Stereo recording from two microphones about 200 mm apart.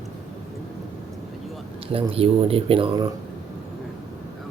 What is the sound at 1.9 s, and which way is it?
Speech, 25° right (ahead or behind).